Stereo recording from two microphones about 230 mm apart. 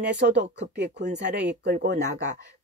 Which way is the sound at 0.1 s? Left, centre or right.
Right.